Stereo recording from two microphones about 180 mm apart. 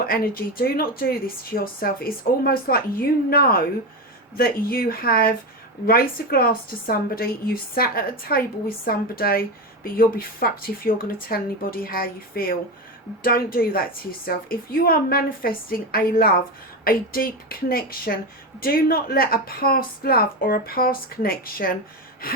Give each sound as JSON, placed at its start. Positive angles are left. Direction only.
{"t": 0.0, "sound": "a woman's voice", "side_deg": 55}